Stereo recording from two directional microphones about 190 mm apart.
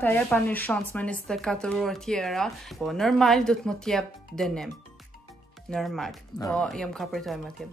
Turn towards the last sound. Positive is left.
turn(degrees=0)  # may be behind; listen again after turning